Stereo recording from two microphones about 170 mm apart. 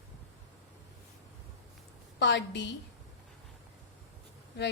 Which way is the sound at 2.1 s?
90° left.